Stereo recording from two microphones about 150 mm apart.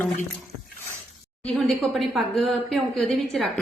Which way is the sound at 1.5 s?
Centre (ahead or behind).